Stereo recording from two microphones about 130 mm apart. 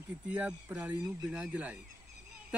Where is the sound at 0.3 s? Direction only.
10° right (ahead or behind).